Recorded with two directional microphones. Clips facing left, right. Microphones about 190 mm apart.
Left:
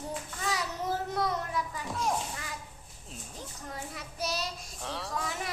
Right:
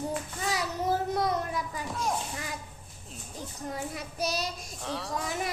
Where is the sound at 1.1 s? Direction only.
15° right (ahead or behind).